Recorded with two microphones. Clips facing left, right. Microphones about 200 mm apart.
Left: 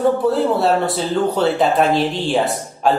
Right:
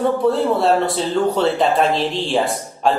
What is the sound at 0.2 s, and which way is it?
A man's voice, centre (ahead or behind).